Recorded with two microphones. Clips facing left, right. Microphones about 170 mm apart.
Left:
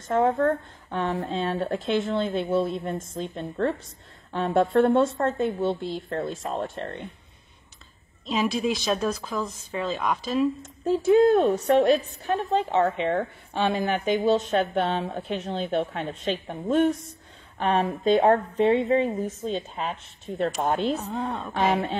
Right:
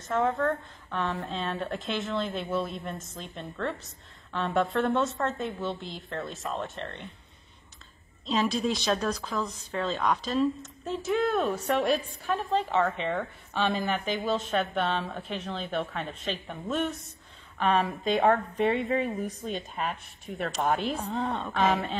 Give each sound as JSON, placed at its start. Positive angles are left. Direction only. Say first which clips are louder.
{"t": 0.1, "sound": "a woman's voice", "louder": "left 5 dB", "side_deg": 30}
{"t": 4.3, "sound": "a woman's voice", "louder": "left 5 dB", "side_deg": 30}
{"t": 5.8, "sound": "a woman's voice", "louder": "left 9 dB", "side_deg": 0}
{"t": 6.0, "sound": "speech", "louder": "left 1 dB", "side_deg": 35}
{"t": 8.3, "sound": "speech", "louder": "left 2 dB", "side_deg": 15}
{"t": 8.7, "sound": "a woman's voice", "louder": "left 2 dB", "side_deg": 0}
{"t": 9.0, "sound": "speech", "louder": "left 3 dB", "side_deg": 15}
{"t": 10.8, "sound": "a woman's voice", "louder": "left 10 dB", "side_deg": 30}
{"t": 21.1, "sound": "a woman's voice", "louder": "left 1 dB", "side_deg": 0}